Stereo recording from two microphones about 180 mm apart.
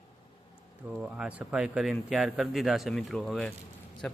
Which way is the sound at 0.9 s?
5° right (ahead or behind).